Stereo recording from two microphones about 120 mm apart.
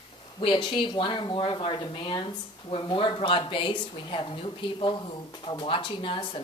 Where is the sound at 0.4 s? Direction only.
45° left (ahead or behind).